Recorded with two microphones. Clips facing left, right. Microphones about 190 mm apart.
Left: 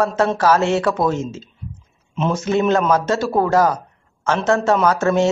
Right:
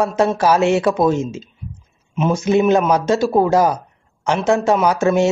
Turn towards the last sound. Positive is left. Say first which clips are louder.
# right 1 dB
turn(degrees=-15)  # may be behind; listen again after turning